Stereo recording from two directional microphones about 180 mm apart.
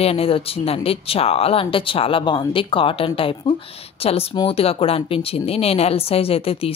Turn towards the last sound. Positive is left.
turn(degrees=30)  # may be behind; listen again after turning